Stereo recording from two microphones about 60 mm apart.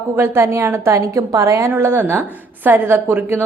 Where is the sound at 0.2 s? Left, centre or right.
Right.